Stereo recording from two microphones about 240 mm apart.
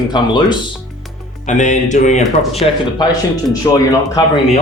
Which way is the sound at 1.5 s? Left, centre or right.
Left.